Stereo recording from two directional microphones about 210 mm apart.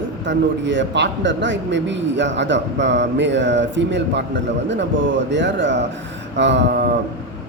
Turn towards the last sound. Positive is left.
turn(degrees=-55)  # may be behind; listen again after turning